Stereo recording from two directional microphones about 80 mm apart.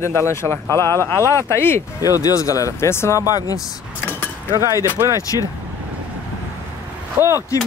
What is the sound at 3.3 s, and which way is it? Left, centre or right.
Speech, left.